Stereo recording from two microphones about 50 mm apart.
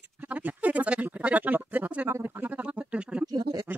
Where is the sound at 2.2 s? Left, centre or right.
Right.